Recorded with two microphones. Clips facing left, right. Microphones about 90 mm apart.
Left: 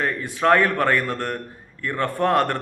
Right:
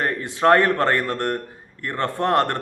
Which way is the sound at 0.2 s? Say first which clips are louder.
Right 2 dB; 25° right (ahead or behind).